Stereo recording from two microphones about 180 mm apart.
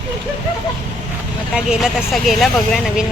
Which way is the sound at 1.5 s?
5° right (ahead or behind).